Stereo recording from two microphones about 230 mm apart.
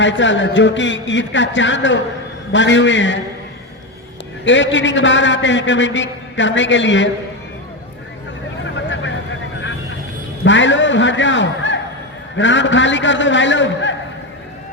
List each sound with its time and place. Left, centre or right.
0.0 s a man's voice: left
4.4 s a man's voice: left
8.6 s vehicle: left
10.4 s a sound: left
12.4 s a man's voice: left